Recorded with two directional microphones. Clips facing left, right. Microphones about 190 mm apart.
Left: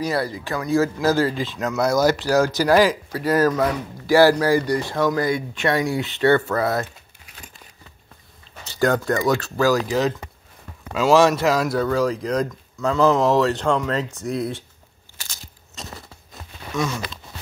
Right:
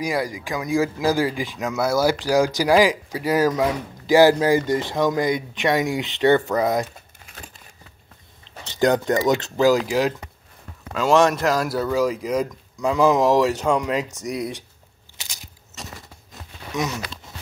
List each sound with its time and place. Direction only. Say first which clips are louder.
0.0 s speech: left 1 dB; 15° right (ahead or behind)
8.7 s speech: right 1 dB; 20° right (ahead or behind)
10.9 s speech: left 2 dB; 5° left (ahead or behind); by 14.6 s 10° right (ahead or behind)
15.2 s a sound: left 1 dB; 15° right (ahead or behind)